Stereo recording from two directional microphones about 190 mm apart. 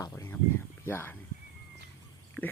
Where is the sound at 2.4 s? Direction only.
10° left (ahead or behind).